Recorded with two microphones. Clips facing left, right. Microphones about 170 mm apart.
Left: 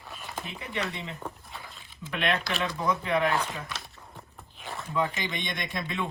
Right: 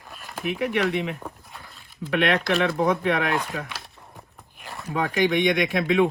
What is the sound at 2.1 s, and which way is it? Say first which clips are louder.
Speech: right 8 dB; 65° right (ahead or behind).